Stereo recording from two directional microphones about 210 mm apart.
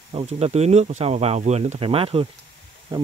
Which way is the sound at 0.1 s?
30° right (ahead or behind).